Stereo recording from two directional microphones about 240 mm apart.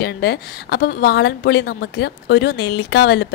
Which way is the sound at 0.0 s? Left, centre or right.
Left.